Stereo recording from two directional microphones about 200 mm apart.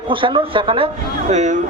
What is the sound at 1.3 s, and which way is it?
Speech, 35° right (ahead or behind).